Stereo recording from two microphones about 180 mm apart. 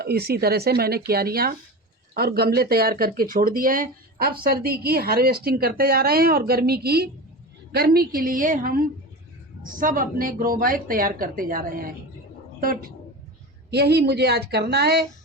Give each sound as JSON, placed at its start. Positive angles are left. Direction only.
{"t": 0.0, "sound": "a woman's voice", "side_deg": -60}
{"t": 13.7, "sound": "a woman's voice", "side_deg": -65}